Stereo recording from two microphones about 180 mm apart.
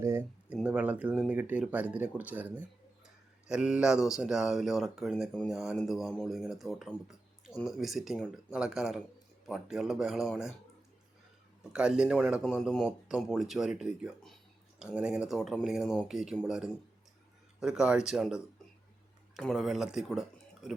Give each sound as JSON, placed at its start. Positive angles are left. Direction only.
{"t": 0.0, "sound": "speech", "side_deg": -15}
{"t": 11.7, "sound": "speech", "side_deg": -5}
{"t": 19.4, "sound": "speech", "side_deg": 0}